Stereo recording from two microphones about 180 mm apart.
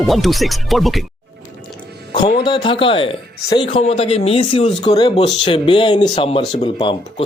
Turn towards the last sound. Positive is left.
turn(degrees=25)  # may be behind; listen again after turning